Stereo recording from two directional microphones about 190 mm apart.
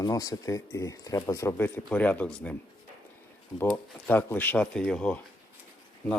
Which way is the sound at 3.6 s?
10° left (ahead or behind).